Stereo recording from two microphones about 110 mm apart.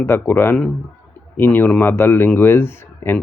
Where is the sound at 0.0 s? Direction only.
20° left (ahead or behind).